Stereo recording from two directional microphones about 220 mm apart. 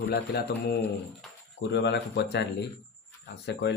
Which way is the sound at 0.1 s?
45° left (ahead or behind).